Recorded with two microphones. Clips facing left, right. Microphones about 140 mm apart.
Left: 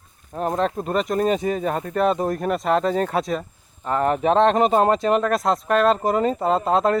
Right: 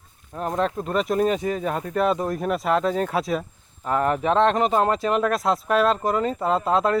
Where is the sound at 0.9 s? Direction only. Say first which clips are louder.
Even; 5° right (ahead or behind).